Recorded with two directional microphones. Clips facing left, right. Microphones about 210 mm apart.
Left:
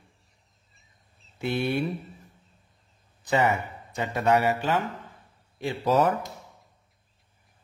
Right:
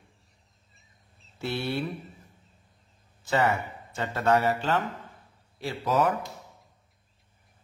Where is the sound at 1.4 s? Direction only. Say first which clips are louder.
Left 4 dB; 20° left (ahead or behind).